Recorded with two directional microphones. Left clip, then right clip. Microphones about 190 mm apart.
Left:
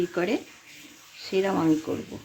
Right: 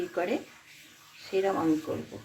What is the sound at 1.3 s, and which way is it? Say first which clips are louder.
Speech: left 3 dB; 55° left (ahead or behind).